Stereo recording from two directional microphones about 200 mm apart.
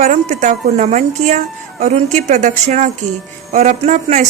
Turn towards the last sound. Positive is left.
turn(degrees=-35)  # may be behind; listen again after turning